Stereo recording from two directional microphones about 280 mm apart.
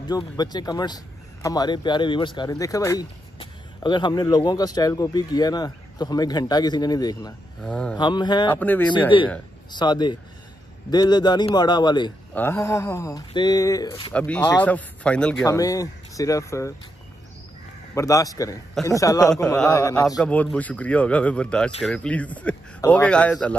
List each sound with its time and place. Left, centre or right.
0.0 s a man's voice: centre
7.6 s a man's voice: centre
8.0 s a man's voice: centre
14.1 s a man's voice: centre
17.9 s a man's voice: centre